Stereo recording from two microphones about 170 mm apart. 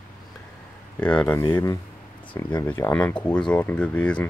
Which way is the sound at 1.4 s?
25° left (ahead or behind).